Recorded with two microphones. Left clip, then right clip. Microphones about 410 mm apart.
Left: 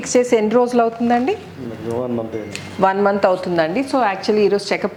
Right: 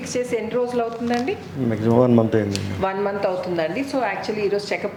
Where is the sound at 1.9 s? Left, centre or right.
Right.